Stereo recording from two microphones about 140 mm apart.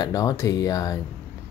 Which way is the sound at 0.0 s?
25° left (ahead or behind).